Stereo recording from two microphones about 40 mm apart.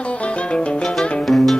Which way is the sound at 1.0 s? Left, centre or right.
Centre.